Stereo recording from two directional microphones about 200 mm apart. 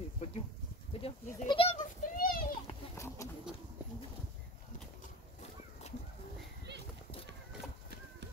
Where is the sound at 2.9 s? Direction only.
15° left (ahead or behind).